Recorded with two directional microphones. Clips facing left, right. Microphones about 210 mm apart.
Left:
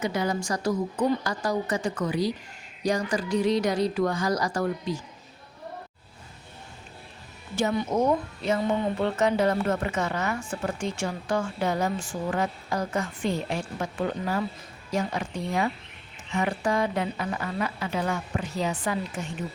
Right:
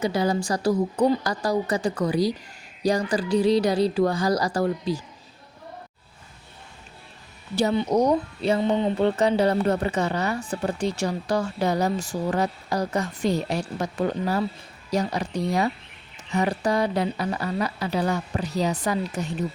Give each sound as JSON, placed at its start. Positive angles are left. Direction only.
{"t": 0.0, "sound": "speech", "side_deg": -35}
{"t": 7.5, "sound": "speech", "side_deg": -30}